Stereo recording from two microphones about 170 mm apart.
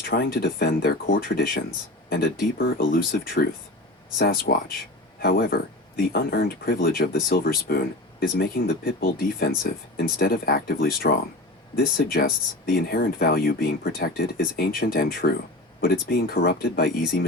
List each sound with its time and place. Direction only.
0.0 s speech: 60° left (ahead or behind)